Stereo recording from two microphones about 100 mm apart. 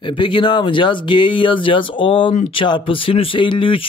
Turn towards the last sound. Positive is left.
turn(degrees=60)  # may be behind; listen again after turning